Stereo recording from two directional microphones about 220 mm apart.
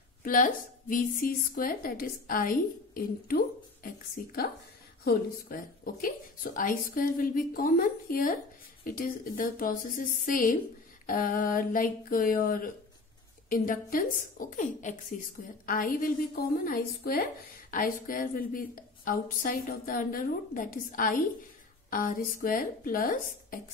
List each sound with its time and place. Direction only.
0.2 s a woman's voice: 40° left (ahead or behind)